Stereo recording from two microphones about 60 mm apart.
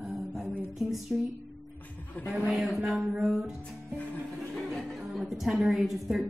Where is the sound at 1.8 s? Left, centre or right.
Left.